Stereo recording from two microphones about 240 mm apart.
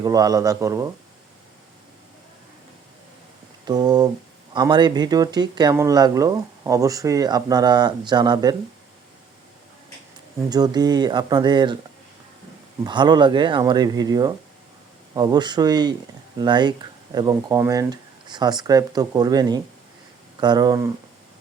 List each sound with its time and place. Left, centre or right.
0.0 s speech: centre
3.7 s speech: centre
10.5 s speech: centre
12.8 s speech: centre